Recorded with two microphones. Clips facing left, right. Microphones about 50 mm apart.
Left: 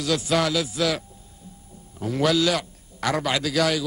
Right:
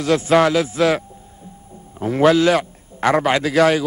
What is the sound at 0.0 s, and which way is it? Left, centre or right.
A man's voice, right.